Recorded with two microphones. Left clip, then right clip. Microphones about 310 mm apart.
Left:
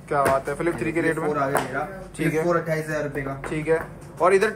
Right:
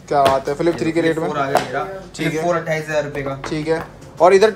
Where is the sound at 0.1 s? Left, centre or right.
Centre.